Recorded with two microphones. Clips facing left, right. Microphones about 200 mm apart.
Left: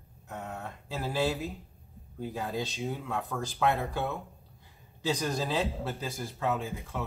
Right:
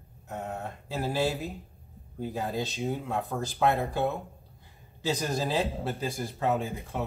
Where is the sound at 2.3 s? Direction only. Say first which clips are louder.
Right 2 dB; 40° right (ahead or behind).